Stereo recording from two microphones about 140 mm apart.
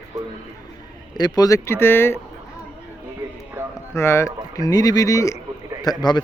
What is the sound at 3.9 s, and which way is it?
A man's voice, 20° left (ahead or behind).